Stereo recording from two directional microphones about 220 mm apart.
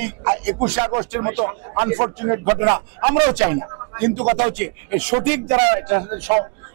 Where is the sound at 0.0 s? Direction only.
10° right (ahead or behind).